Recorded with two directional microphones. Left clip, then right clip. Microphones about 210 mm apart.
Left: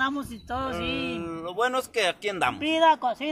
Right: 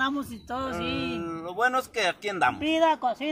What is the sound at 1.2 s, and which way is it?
Speech, 35° left (ahead or behind).